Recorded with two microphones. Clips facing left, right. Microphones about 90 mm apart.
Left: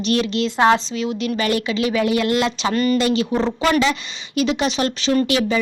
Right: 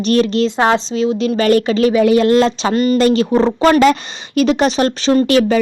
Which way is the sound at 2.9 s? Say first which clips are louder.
Right 6 dB; 40° right (ahead or behind).